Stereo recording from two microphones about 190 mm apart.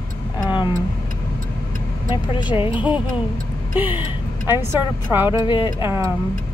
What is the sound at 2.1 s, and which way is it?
Speech, 25° left (ahead or behind).